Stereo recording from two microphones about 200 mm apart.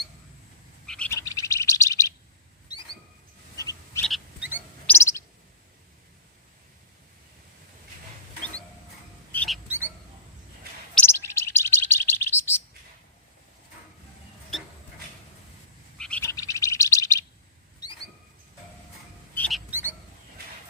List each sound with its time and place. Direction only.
0.9 s bird: 5° left (ahead or behind)
2.7 s rodents: 20° left (ahead or behind)
3.6 s bird: 15° left (ahead or behind)
4.0 s frog: centre (ahead or behind)
4.9 s bird: 15° left (ahead or behind)
9.3 s rodents: 5° left (ahead or behind)
9.6 s rodents: 10° right (ahead or behind)
10.9 s bird: 10° left (ahead or behind)
16.0 s bird: 5° left (ahead or behind)
17.8 s rodents: 20° left (ahead or behind)
19.3 s rodents: 5° left (ahead or behind)
19.7 s a sound: 10° right (ahead or behind)